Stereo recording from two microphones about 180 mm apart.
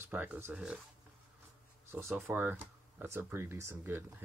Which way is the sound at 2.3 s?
10° right (ahead or behind).